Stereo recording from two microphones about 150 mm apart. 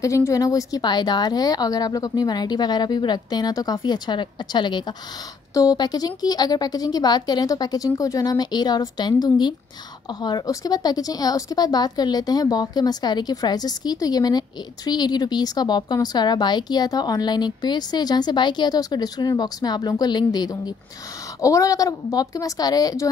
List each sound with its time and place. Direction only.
0.0 s a woman's voice: 20° left (ahead or behind)